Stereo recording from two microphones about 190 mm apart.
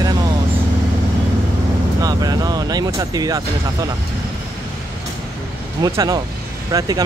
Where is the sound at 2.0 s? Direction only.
20° right (ahead or behind).